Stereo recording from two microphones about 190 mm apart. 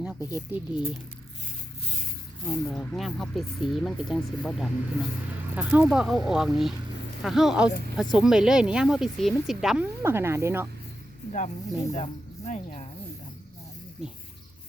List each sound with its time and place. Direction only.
0.0 s a sound: 5° right (ahead or behind)
0.5 s speech: 5° right (ahead or behind)
2.5 s speech: 5° left (ahead or behind); by 10.7 s 15° right (ahead or behind)
11.3 s speech: 40° left (ahead or behind)
14.0 s speech: 5° right (ahead or behind)